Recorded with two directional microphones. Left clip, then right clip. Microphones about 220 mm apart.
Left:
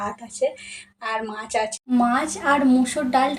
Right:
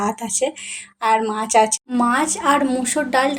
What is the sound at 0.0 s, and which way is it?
Speech, 45° right (ahead or behind).